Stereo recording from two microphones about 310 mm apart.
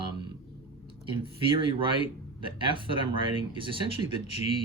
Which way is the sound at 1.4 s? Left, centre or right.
Centre.